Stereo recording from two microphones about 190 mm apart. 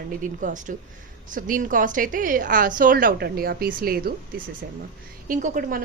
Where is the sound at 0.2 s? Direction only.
45° right (ahead or behind).